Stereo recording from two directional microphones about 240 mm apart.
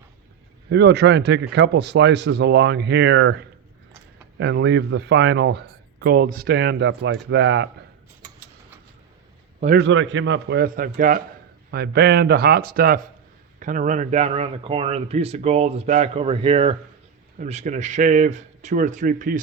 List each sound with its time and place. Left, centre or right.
0.7 s speech: right
9.7 s speech: right